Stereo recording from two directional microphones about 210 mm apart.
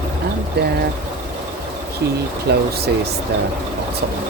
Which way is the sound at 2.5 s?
50° right (ahead or behind).